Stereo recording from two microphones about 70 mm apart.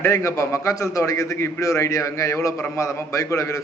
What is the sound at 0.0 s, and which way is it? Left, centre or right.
A man's voice, left.